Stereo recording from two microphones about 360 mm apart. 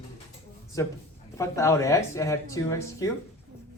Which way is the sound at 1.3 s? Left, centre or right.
Centre.